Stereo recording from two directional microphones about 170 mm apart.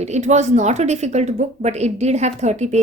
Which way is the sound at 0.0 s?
40° right (ahead or behind).